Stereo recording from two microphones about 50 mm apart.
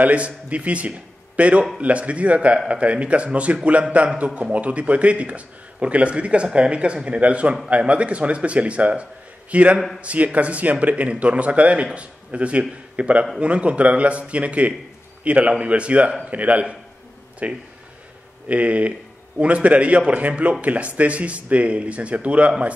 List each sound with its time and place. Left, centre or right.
0.0 s a man's voice: right